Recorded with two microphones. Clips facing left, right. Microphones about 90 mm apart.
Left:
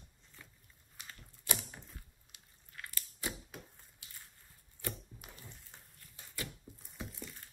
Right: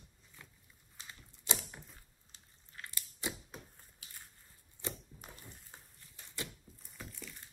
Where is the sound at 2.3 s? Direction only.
30° right (ahead or behind).